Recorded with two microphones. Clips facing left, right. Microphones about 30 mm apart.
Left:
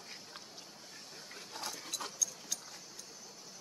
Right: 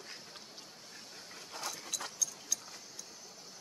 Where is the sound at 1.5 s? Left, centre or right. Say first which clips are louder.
Right 1 dB; right.